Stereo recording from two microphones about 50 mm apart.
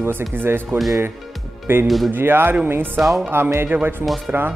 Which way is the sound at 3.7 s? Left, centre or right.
Right.